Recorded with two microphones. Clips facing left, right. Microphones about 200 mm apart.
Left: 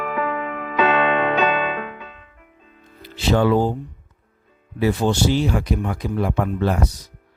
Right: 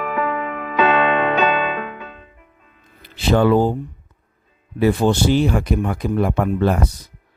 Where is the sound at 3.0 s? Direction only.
55° right (ahead or behind).